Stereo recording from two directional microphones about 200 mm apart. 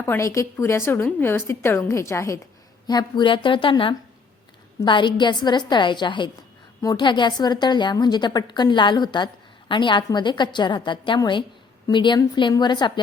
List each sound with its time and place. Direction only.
0.0 s a woman's voice: 15° left (ahead or behind)